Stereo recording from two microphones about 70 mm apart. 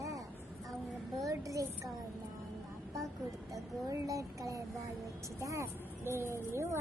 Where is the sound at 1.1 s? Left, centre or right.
Right.